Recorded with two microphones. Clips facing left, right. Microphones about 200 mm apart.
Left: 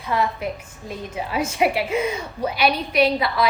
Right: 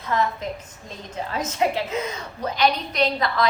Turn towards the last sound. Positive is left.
turn(degrees=10)  # may be behind; listen again after turning